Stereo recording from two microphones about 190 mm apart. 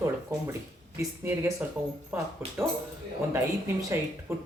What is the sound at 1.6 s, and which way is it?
Speech, 5° right (ahead or behind).